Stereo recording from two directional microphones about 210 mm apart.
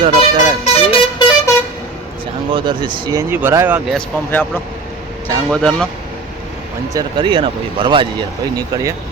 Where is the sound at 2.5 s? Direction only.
20° right (ahead or behind).